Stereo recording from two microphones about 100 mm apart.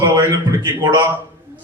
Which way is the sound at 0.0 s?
35° right (ahead or behind).